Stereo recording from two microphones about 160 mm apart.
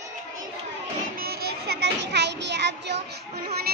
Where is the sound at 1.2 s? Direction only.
85° right.